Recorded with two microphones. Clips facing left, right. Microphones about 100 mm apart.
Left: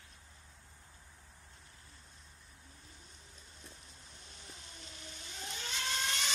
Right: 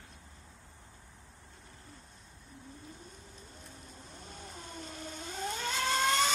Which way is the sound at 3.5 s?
45° right (ahead or behind).